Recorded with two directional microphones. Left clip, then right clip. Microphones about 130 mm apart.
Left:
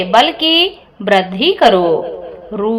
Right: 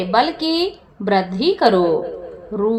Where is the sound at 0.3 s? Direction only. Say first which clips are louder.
Left 8 dB; 60° left (ahead or behind).